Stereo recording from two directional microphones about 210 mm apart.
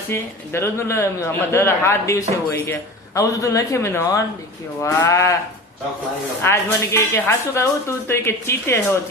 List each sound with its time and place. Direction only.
0.1 s a man's voice: 10° left (ahead or behind)
6.4 s a man's voice: 10° left (ahead or behind)